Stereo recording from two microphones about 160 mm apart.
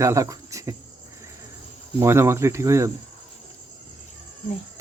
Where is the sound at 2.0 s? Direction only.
15° right (ahead or behind).